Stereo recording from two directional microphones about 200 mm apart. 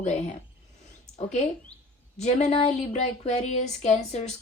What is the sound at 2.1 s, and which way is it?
A woman's voice, 35° left (ahead or behind).